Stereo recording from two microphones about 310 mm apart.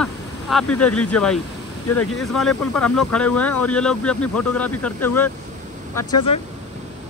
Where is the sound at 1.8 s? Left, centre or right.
Left.